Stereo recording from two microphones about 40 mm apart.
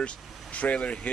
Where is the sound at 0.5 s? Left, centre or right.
Left.